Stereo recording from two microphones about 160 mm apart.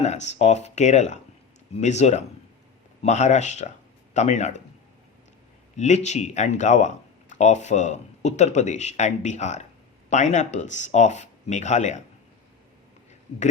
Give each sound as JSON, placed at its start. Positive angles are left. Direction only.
{"t": 0.0, "sound": "speech", "side_deg": 45}
{"t": 5.7, "sound": "speech", "side_deg": 45}